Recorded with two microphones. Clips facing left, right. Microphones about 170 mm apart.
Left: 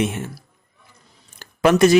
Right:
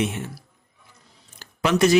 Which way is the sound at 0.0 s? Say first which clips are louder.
Left 3 dB; 50° left (ahead or behind).